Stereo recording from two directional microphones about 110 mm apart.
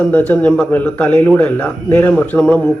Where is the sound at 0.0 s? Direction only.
15° left (ahead or behind).